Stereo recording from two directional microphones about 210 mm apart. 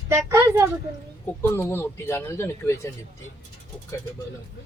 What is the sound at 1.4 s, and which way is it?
Speech, 10° left (ahead or behind).